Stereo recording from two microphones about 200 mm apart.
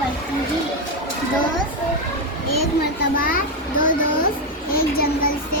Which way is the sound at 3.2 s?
45° left (ahead or behind).